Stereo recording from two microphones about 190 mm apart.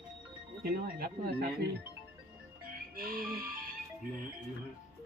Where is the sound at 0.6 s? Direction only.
55° right (ahead or behind).